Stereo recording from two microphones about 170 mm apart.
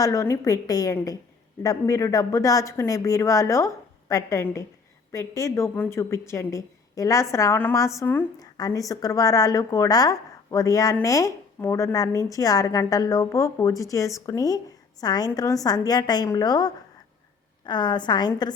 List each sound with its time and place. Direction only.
0.0 s a woman's voice: 20° left (ahead or behind)